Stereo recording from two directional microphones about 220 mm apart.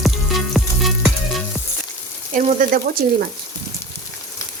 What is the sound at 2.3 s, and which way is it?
Frying, 35° right (ahead or behind).